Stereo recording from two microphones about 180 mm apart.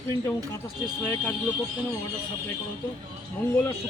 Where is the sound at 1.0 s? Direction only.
10° left (ahead or behind).